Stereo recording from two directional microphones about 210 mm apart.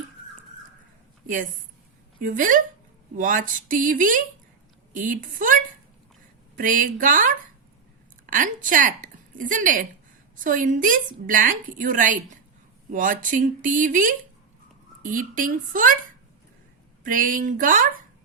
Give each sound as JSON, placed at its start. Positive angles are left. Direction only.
{"t": 2.2, "sound": "a woman's voice", "side_deg": -40}
{"t": 6.6, "sound": "a woman's voice", "side_deg": -40}
{"t": 17.0, "sound": "a woman's voice", "side_deg": -40}